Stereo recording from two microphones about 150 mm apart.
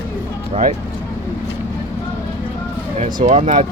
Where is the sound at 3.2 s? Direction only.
45° right (ahead or behind).